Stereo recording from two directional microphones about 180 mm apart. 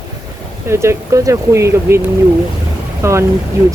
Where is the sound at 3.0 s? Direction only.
15° right (ahead or behind).